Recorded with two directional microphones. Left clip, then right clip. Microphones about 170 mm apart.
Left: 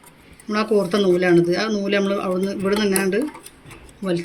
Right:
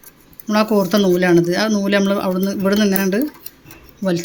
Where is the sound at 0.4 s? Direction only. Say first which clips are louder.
Right 3 dB; 50° right (ahead or behind).